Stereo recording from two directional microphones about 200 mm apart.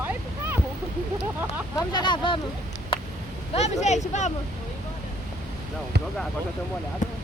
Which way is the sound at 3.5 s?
35° left (ahead or behind).